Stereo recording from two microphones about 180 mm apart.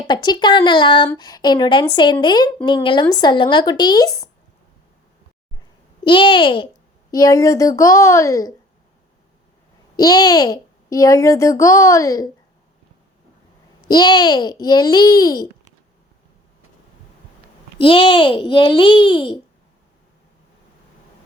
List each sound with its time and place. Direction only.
0.1 s a woman's voice: 25° left (ahead or behind)
6.1 s a woman's voice: 25° left (ahead or behind)
10.0 s a child's voice: 20° left (ahead or behind)
13.8 s a woman's voice: 25° left (ahead or behind)
17.7 s a woman's voice: 30° left (ahead or behind)